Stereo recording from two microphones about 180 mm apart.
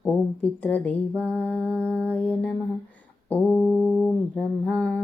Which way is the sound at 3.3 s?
5° left (ahead or behind).